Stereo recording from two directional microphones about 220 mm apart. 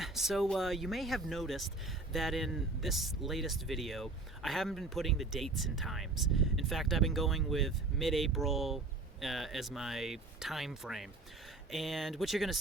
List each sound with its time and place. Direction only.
0.0 s speech: centre (ahead or behind)